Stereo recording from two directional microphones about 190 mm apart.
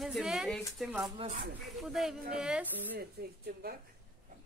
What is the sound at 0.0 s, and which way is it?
Speech, centre (ahead or behind).